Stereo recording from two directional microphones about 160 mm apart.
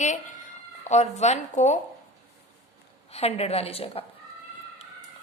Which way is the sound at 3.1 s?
40° left (ahead or behind).